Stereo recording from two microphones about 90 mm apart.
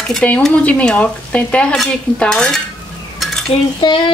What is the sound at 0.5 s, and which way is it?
A woman's voice, 15° left (ahead or behind).